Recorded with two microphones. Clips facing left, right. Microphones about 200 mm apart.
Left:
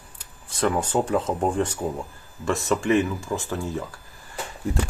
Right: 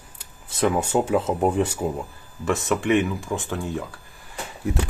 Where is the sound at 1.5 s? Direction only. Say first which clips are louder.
Right 2 dB; 10° right (ahead or behind).